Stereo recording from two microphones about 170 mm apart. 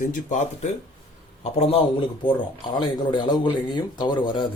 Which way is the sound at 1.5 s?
35° left (ahead or behind).